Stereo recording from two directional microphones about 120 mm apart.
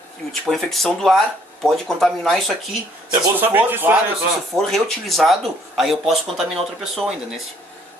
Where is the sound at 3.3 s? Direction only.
15° right (ahead or behind).